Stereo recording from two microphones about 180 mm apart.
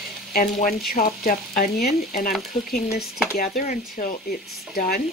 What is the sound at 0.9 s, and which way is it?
Speech, 50° left (ahead or behind).